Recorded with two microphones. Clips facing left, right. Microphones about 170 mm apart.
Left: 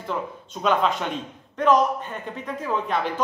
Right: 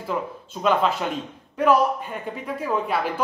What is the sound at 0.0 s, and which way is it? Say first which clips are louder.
A man's voice: right 2 dB; 5° right (ahead or behind).